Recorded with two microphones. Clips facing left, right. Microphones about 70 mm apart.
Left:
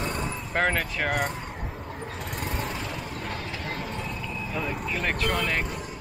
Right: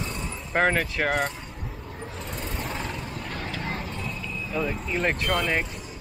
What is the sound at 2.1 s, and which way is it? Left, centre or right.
Vehicle, left.